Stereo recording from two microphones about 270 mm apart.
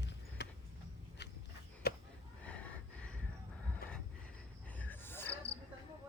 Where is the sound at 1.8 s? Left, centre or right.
Left.